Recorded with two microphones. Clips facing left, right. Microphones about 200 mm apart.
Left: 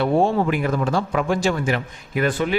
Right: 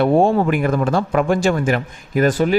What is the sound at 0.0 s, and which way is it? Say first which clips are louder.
A man's voice: right 4 dB; 50° right (ahead or behind).